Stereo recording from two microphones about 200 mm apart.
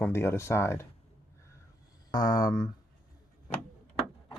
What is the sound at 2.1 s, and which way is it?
Speech, 20° left (ahead or behind).